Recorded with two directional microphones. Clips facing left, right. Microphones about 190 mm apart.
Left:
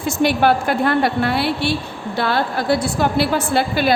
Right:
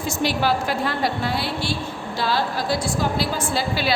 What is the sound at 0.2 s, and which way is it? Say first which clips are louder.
A woman's voice: left 6 dB; 55° left (ahead or behind).